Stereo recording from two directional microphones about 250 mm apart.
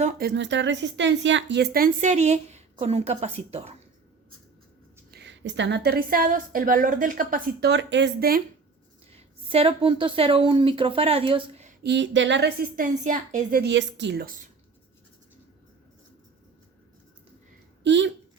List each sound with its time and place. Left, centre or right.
0.0 s a woman's voice: right
5.1 s a woman's voice: right
9.1 s a woman's voice: right
11.8 s a woman's voice: right
17.8 s speech: right